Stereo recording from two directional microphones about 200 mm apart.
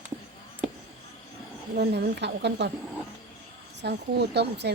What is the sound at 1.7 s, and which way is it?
Speech, 55° right (ahead or behind).